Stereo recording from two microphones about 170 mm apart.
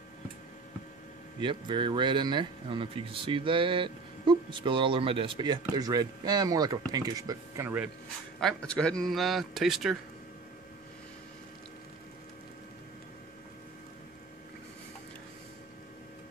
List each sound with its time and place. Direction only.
1.4 s speech: 30° right (ahead or behind); by 7.9 s 10° right (ahead or behind)
8.4 s a man's voice: 5° left (ahead or behind)